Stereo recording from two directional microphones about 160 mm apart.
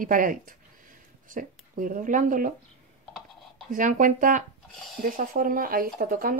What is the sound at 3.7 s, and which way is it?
Speech, 55° right (ahead or behind).